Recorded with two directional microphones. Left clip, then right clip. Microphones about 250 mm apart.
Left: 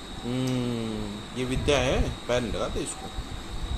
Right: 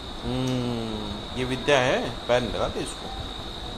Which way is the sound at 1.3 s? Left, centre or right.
Centre.